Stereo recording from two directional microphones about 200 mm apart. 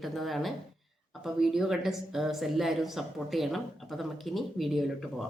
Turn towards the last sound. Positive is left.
turn(degrees=0)  # may be behind; listen again after turning